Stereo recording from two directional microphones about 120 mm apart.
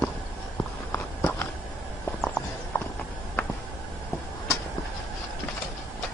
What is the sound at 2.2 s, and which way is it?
Clip-clop, 10° left (ahead or behind).